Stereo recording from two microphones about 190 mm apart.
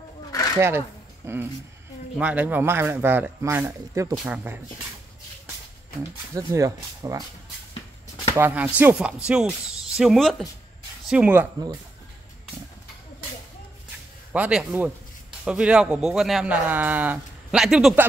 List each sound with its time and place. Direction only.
0.6 s speech: 15° right (ahead or behind)
6.3 s speech: 15° right (ahead or behind)
8.4 s a man's voice: 10° right (ahead or behind)
14.3 s a man's voice: 10° right (ahead or behind)